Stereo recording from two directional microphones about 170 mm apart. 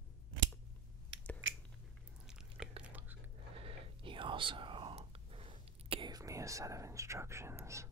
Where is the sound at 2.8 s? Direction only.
10° right (ahead or behind).